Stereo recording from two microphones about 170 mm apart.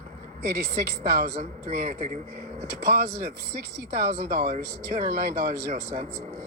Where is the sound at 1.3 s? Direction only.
50° right (ahead or behind).